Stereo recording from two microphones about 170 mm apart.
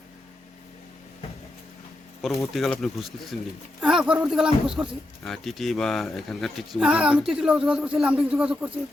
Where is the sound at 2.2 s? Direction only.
Centre (ahead or behind).